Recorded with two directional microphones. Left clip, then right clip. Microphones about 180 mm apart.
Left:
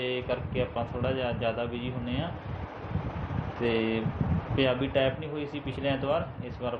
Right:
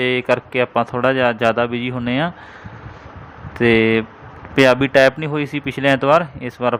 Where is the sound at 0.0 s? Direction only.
50° right (ahead or behind).